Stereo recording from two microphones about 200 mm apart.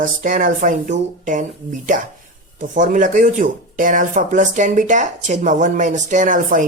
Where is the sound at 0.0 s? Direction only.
40° right (ahead or behind).